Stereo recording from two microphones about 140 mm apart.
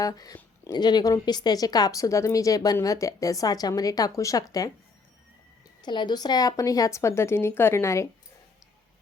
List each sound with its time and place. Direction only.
0.0 s speech: 25° left (ahead or behind)
5.8 s speech: 30° left (ahead or behind)